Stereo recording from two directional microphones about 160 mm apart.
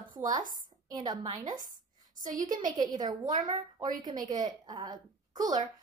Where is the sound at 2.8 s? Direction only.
25° right (ahead or behind).